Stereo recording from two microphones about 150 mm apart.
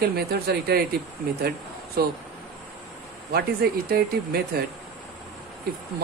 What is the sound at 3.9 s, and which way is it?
Speech, 90° right.